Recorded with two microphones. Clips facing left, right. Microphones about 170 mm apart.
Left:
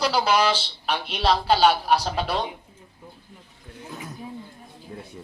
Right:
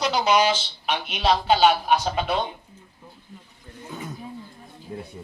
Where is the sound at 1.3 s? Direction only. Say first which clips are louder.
Right 1 dB; centre (ahead or behind).